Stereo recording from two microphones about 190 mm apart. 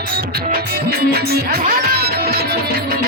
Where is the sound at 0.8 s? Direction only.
55° right (ahead or behind).